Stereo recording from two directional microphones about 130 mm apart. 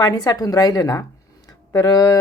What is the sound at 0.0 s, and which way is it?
Speech, 30° left (ahead or behind).